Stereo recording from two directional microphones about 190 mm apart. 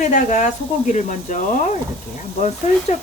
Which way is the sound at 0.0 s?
40° left (ahead or behind).